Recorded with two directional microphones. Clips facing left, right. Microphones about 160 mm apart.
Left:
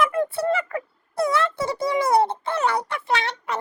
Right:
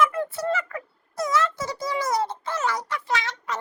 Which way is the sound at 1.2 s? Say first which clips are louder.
Left 3 dB; 60° left (ahead or behind).